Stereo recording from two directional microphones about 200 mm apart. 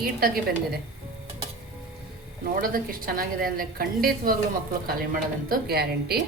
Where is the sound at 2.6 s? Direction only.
45° right (ahead or behind).